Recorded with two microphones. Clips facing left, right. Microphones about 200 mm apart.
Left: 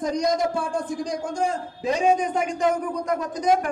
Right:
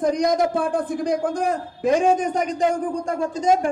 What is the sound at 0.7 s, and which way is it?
A man's voice, 60° right (ahead or behind).